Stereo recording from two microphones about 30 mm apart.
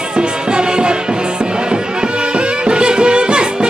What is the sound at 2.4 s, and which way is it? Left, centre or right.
Music, right.